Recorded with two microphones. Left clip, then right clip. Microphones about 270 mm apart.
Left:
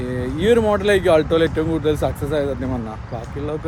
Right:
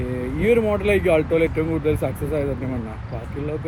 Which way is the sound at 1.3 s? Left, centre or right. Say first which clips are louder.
Left 2 dB; centre.